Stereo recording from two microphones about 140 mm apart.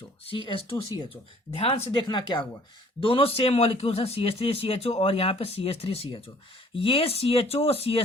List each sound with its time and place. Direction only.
0.3 s speech: 35° left (ahead or behind)